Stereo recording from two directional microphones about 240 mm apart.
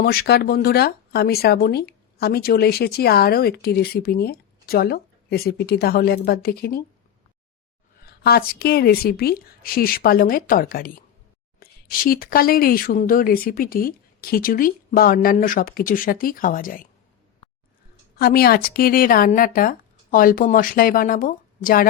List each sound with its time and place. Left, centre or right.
0.0 s speech: left
8.0 s speech: left
18.2 s speech: left